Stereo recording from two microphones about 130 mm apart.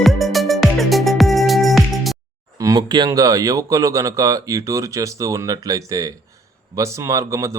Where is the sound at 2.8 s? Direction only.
35° right (ahead or behind).